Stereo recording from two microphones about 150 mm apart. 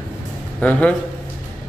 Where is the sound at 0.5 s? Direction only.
10° left (ahead or behind).